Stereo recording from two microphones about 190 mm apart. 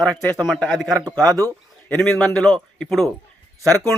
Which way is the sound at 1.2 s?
15° right (ahead or behind).